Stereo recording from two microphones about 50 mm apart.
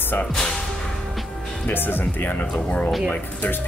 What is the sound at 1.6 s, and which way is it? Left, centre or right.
Speech, left.